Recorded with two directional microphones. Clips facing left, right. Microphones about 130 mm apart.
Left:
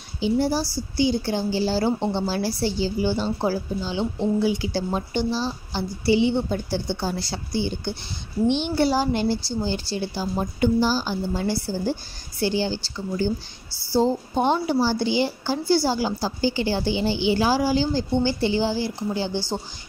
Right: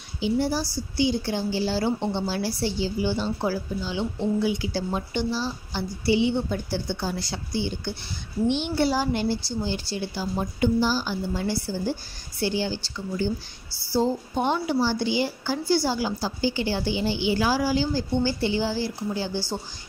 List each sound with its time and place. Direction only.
0.2 s a woman's voice: 35° left (ahead or behind)
8.7 s a woman's voice: 40° left (ahead or behind)
9.0 s a woman's voice: 30° left (ahead or behind)